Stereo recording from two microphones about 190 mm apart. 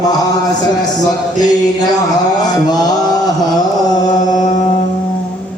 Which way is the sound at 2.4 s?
20° left (ahead or behind).